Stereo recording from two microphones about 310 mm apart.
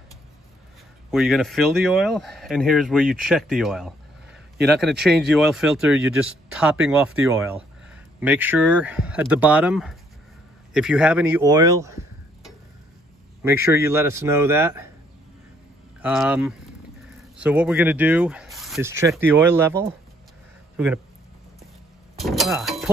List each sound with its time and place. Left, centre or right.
1.1 s speech: centre
13.4 s a man's voice: centre
16.0 s speech: centre
22.2 s a sound: centre